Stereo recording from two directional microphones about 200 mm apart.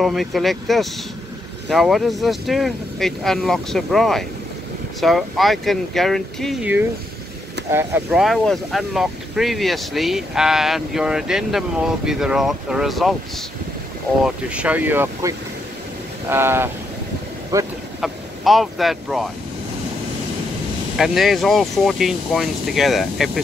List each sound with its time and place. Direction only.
0.0 s speech: centre (ahead or behind)
14.2 s speech: 5° right (ahead or behind)
17.5 s vehicle: 15° right (ahead or behind)
18.0 s speech: centre (ahead or behind)
21.0 s speech: centre (ahead or behind)